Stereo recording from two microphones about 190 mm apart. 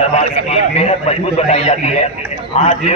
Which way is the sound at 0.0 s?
35° left (ahead or behind).